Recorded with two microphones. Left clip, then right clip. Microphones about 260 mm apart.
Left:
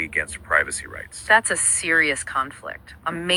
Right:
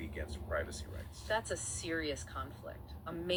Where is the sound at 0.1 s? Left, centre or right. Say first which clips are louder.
Left 17 dB; left.